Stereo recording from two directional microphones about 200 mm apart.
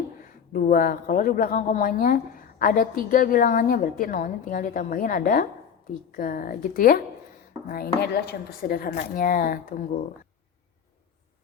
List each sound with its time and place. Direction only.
0.3 s speech: 45° left (ahead or behind)